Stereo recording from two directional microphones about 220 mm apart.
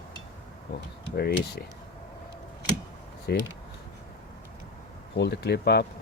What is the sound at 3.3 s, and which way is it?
Speech, 45° left (ahead or behind).